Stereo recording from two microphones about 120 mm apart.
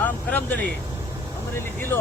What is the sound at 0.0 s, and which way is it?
Vehicle, 15° left (ahead or behind).